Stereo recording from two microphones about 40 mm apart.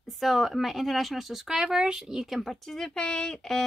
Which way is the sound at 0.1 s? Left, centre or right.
Centre.